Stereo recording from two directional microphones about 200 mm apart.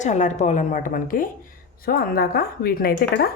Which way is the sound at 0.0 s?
35° left (ahead or behind).